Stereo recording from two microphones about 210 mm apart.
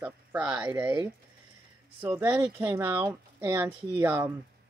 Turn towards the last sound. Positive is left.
turn(degrees=-10)  # may be behind; listen again after turning